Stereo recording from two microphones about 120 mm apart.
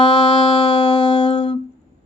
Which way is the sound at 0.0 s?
40° left (ahead or behind).